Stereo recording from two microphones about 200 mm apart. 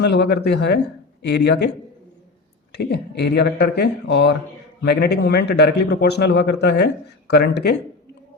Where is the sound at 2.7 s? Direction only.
55° left (ahead or behind).